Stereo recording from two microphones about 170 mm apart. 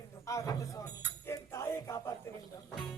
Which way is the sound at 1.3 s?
20° left (ahead or behind).